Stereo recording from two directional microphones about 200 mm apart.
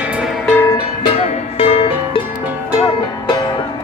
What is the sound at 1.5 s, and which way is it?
Music, 30° left (ahead or behind).